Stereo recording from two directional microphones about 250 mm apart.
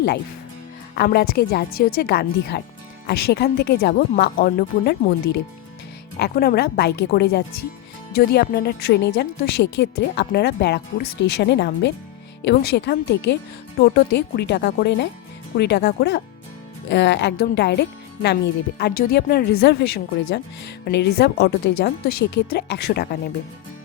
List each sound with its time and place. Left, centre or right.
0.9 s a woman's voice: left